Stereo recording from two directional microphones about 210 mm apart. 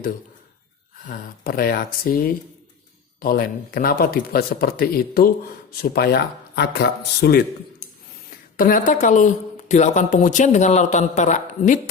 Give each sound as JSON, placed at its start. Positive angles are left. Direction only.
{"t": 1.0, "sound": "speech", "side_deg": 45}
{"t": 8.5, "sound": "speech", "side_deg": 40}